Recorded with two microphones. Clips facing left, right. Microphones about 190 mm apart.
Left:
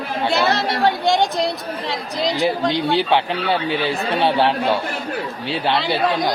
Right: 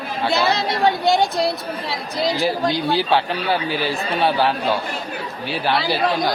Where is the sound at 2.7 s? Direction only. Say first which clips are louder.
Left 1 dB; 25° left (ahead or behind).